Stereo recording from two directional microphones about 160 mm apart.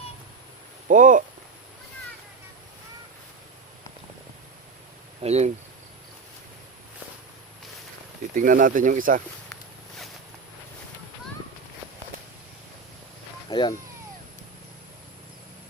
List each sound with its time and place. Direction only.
0.9 s speech: 55° right (ahead or behind)
5.2 s speech: 40° right (ahead or behind)
8.4 s speech: 60° right (ahead or behind)
13.5 s speech: 25° left (ahead or behind)